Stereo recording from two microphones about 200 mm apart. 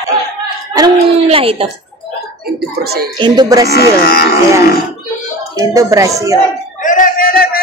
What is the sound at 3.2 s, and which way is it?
Speech, 20° right (ahead or behind).